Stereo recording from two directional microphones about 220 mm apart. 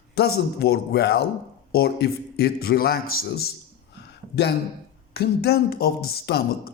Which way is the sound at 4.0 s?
50° left (ahead or behind).